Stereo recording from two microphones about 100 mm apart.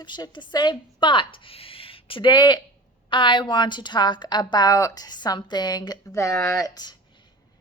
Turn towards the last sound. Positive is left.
turn(degrees=30)  # may be behind; listen again after turning